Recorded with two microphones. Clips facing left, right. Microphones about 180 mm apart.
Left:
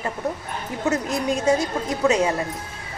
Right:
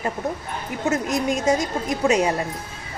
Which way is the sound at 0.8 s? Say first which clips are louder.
Right 1 dB; 15° right (ahead or behind).